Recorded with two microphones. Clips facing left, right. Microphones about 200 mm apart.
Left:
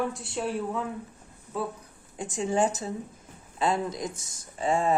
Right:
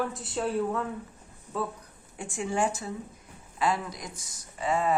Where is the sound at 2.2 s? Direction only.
20° left (ahead or behind).